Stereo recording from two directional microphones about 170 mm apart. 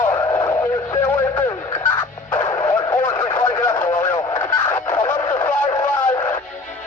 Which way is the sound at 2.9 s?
10° left (ahead or behind).